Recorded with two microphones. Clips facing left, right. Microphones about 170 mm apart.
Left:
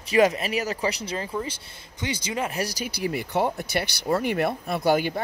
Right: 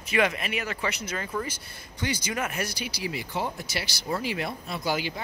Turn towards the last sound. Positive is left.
turn(degrees=55)  # may be behind; listen again after turning